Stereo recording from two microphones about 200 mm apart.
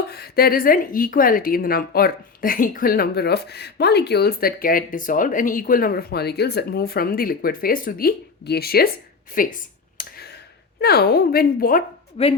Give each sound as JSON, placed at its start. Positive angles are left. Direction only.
{"t": 0.1, "sound": "a woman's voice", "side_deg": 50}
{"t": 10.0, "sound": "a sound", "side_deg": 50}
{"t": 12.2, "sound": "speech", "side_deg": 30}